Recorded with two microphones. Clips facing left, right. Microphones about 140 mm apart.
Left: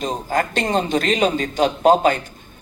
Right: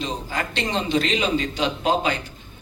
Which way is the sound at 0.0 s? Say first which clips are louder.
Left 6 dB; 45° left (ahead or behind).